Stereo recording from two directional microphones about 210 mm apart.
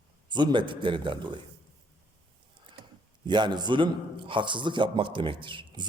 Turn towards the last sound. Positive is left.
turn(degrees=-20)  # may be behind; listen again after turning